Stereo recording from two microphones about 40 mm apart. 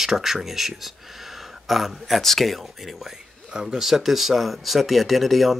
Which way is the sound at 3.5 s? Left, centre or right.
Centre.